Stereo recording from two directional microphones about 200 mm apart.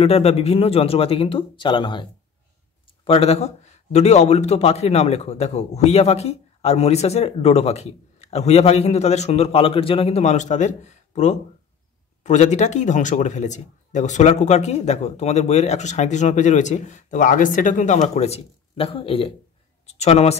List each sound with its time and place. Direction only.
0.0 s speech: 30° left (ahead or behind)
3.1 s a man's voice: 30° left (ahead or behind)